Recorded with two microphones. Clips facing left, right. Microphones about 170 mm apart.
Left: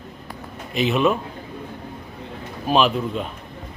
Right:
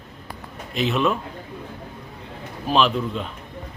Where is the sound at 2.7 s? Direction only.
5° left (ahead or behind).